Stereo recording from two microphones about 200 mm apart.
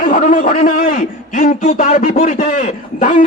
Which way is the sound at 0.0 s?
40° left (ahead or behind).